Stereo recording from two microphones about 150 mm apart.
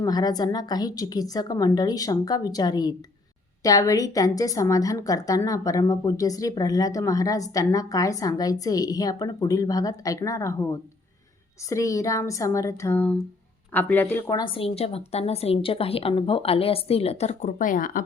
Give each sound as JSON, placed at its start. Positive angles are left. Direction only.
{"t": 0.0, "sound": "a woman's voice", "side_deg": 25}
{"t": 14.3, "sound": "a woman's voice", "side_deg": 35}